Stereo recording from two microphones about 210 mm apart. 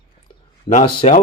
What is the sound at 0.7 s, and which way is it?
Speech, 30° left (ahead or behind).